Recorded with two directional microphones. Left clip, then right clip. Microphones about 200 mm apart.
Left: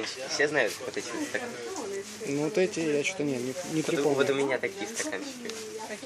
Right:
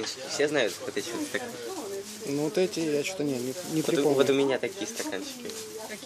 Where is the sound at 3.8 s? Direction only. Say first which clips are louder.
Right 2 dB; 45° right (ahead or behind).